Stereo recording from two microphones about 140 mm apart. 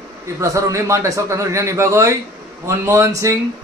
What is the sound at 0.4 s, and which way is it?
A man's voice, 20° right (ahead or behind).